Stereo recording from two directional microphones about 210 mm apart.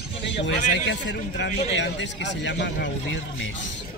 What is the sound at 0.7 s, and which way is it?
A man's voice, 60° left (ahead or behind).